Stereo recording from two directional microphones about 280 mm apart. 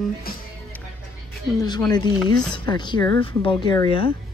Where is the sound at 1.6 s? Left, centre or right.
Centre.